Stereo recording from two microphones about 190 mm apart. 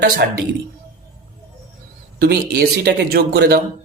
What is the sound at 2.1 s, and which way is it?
A man's voice, 55° right (ahead or behind).